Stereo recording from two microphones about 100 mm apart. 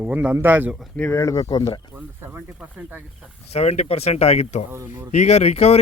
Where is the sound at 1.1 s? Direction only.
35° left (ahead or behind).